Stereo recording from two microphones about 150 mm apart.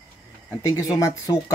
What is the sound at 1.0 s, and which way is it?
Speech, 20° left (ahead or behind).